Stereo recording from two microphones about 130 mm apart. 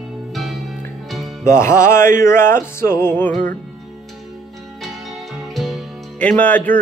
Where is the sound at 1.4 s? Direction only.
20° left (ahead or behind).